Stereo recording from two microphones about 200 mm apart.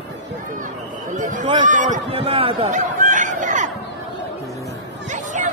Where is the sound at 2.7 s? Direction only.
40° right (ahead or behind).